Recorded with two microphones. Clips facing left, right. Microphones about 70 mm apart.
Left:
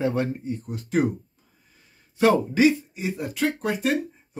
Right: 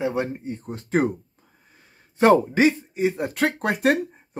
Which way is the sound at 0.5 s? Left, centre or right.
Right.